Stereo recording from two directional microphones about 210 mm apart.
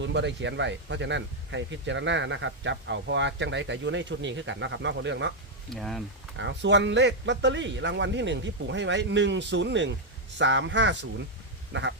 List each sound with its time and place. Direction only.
0.0 s speech: 55° right (ahead or behind)
5.7 s speech: centre (ahead or behind)
6.3 s speech: 60° right (ahead or behind)